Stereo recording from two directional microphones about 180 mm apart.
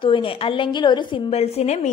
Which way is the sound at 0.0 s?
30° left (ahead or behind).